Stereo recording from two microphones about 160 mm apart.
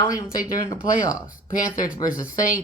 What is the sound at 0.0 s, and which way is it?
Speech, 20° left (ahead or behind).